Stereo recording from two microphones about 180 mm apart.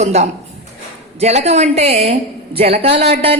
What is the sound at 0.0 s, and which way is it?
A woman's voice, 35° right (ahead or behind).